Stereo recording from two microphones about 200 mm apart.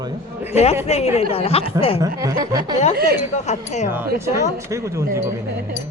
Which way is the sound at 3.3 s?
35° left (ahead or behind).